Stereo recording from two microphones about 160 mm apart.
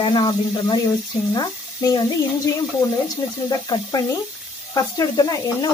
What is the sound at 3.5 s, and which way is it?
Speech, 25° left (ahead or behind).